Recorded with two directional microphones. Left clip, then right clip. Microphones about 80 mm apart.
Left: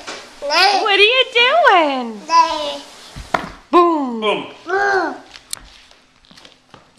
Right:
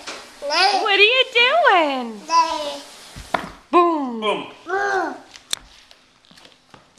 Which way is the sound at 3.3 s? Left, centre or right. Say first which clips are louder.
Left 4 dB; centre.